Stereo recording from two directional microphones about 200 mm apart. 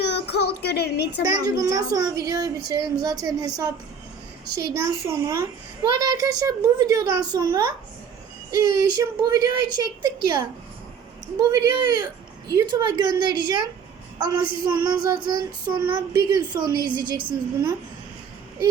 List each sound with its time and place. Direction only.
0.0 s child singing: 55° left (ahead or behind)
1.2 s a child's voice: 15° right (ahead or behind)
5.0 s a child's voice: 15° right (ahead or behind)